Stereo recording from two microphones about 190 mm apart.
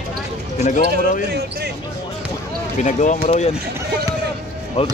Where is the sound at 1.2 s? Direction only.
60° right (ahead or behind).